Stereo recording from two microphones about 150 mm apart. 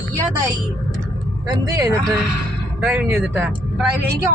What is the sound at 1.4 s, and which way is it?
Speech, 25° right (ahead or behind).